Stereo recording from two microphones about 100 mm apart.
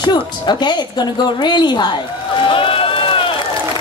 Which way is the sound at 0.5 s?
50° left (ahead or behind).